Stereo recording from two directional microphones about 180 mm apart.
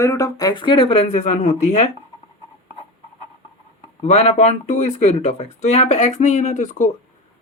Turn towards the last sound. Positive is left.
turn(degrees=40)  # may be behind; listen again after turning